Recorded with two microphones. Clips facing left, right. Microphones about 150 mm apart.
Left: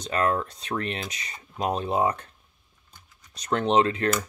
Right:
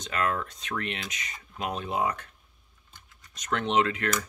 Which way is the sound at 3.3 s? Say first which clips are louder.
Left 4 dB; 35° left (ahead or behind).